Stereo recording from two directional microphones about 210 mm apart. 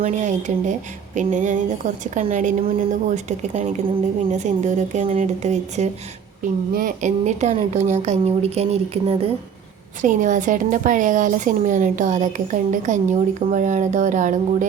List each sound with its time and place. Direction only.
0.0 s speech: 35° right (ahead or behind)